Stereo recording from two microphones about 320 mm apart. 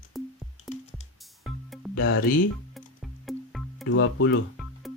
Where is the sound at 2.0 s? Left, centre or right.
Left.